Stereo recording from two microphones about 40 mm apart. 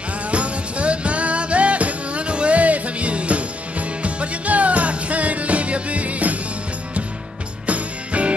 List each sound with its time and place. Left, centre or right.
0.3 s music: right
7.6 s music: right